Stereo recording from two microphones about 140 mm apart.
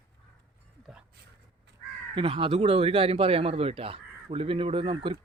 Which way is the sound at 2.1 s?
40° right (ahead or behind).